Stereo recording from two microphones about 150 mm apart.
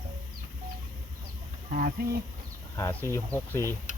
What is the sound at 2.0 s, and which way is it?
Speech, 75° right (ahead or behind).